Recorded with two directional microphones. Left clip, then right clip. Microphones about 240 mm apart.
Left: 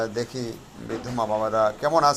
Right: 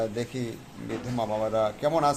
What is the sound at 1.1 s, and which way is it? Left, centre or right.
Speech, centre.